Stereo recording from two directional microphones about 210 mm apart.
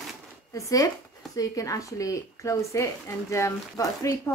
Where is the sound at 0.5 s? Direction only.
15° left (ahead or behind).